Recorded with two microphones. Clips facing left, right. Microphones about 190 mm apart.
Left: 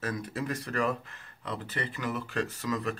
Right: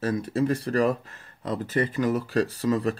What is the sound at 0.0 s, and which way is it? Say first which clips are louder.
Speech: right 9 dB; 30° right (ahead or behind).